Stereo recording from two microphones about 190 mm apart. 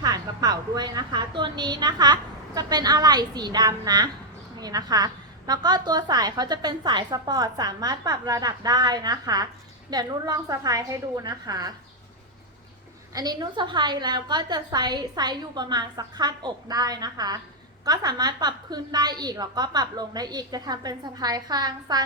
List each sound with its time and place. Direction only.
0.0 s a woman's voice: 20° right (ahead or behind)
13.1 s a woman's voice: 20° right (ahead or behind)